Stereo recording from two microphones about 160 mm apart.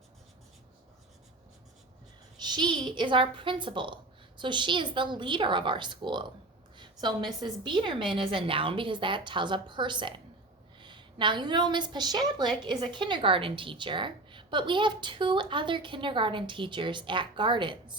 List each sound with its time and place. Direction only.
2.4 s a woman's voice: 25° right (ahead or behind)
6.7 s a sound: 30° right (ahead or behind)
7.3 s a woman's voice: 30° right (ahead or behind)